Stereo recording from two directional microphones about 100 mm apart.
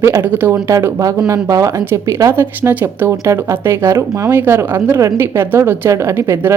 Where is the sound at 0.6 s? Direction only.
30° right (ahead or behind).